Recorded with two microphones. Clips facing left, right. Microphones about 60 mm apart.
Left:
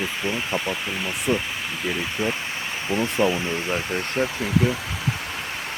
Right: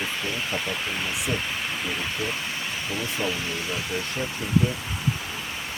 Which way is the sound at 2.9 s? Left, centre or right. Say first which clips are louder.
Left 8 dB; left.